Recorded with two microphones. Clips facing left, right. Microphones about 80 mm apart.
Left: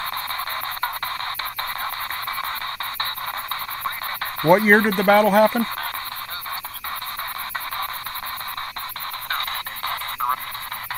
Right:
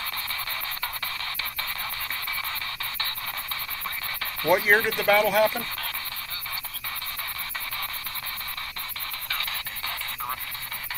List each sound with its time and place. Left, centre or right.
0.7 s music: left
4.2 s speech: left
9.3 s a sound: left